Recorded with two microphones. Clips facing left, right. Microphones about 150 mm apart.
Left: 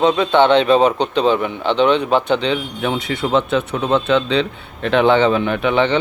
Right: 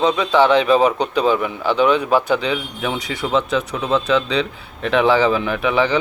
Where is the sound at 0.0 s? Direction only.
30° left (ahead or behind).